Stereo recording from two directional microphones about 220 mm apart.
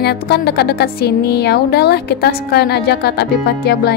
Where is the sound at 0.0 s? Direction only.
45° left (ahead or behind).